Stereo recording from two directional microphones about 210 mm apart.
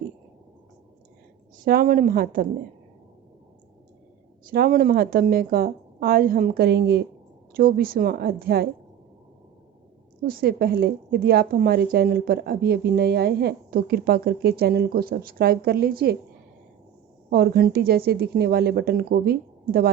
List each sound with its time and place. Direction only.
1.6 s a woman's voice: 40° right (ahead or behind)
4.4 s a woman's voice: 45° right (ahead or behind)
10.2 s a woman's voice: 45° right (ahead or behind)
17.2 s a woman's voice: 50° right (ahead or behind)